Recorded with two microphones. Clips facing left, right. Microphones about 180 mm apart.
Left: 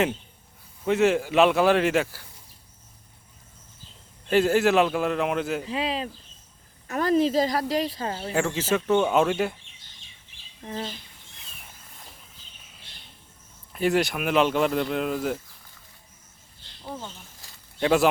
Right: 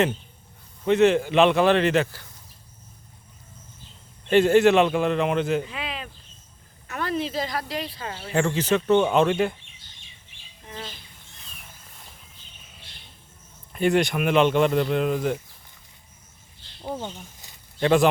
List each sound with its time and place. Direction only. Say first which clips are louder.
0.9 s speech: right 3 dB; 5° left (ahead or behind)
4.3 s speech: right 4 dB; centre (ahead or behind)
5.6 s speech: left 6 dB; 35° left (ahead or behind)
8.3 s speech: right 3 dB; 5° left (ahead or behind)
10.7 s speech: left 5 dB; 30° left (ahead or behind)
13.7 s speech: right 2 dB; centre (ahead or behind)
17.4 s a sound: right 1 dB; 20° right (ahead or behind)
17.7 s speech: right 2 dB; 5° left (ahead or behind)